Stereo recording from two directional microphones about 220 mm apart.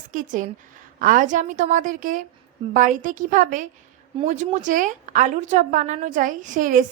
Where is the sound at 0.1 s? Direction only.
35° right (ahead or behind).